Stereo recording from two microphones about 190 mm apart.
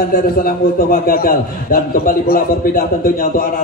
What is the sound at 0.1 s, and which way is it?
A man's voice, 50° left (ahead or behind).